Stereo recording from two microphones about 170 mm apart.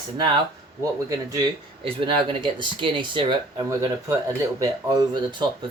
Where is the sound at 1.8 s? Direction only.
30° right (ahead or behind).